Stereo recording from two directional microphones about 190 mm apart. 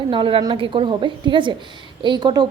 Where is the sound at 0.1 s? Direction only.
25° right (ahead or behind).